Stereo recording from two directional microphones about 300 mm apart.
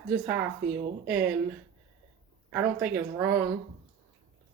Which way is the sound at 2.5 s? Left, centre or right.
Centre.